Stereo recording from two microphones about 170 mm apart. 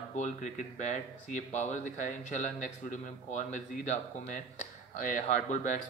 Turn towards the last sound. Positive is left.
turn(degrees=50)  # may be behind; listen again after turning